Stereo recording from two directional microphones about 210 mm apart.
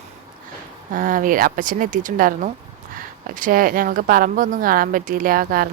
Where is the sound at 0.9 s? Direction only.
40° right (ahead or behind).